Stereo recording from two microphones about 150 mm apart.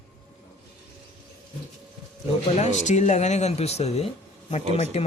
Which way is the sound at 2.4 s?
50° left (ahead or behind).